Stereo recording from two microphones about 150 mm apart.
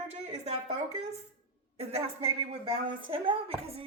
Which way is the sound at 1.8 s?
40° right (ahead or behind).